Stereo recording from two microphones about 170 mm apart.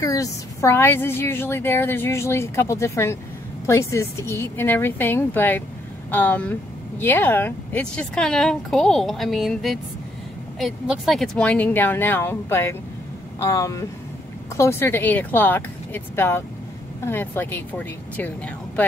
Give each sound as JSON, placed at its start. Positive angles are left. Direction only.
{"t": 0.0, "sound": "a woman's voice", "side_deg": 20}